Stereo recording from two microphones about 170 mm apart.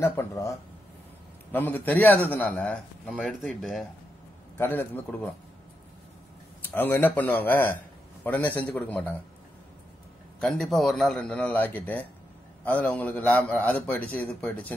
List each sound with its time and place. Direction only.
0.0 s a man's voice: 15° left (ahead or behind); by 3.8 s centre (ahead or behind)
4.6 s a man's voice: 10° left (ahead or behind)
6.6 s a man's voice: 10° left (ahead or behind)
10.4 s a man's voice: centre (ahead or behind)